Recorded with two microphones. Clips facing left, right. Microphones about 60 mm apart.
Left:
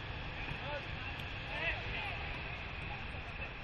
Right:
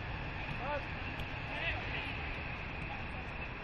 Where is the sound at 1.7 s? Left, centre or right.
Right.